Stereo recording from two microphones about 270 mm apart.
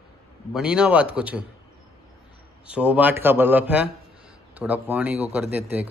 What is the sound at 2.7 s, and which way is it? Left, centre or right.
A man's voice, centre.